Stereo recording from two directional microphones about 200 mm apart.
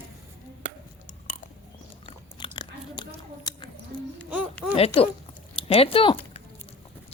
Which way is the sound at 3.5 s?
20° left (ahead or behind).